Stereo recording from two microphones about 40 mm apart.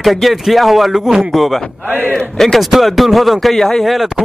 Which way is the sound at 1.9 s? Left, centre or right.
Right.